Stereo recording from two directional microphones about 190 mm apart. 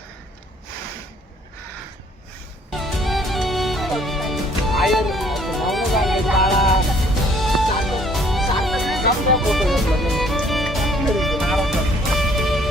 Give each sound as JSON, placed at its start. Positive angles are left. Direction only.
{"t": 2.6, "sound": "music", "side_deg": 0}